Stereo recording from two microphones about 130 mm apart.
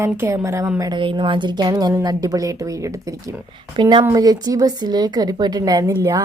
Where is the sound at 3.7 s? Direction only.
40° right (ahead or behind).